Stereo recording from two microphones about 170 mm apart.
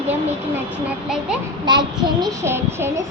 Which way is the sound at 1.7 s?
25° right (ahead or behind).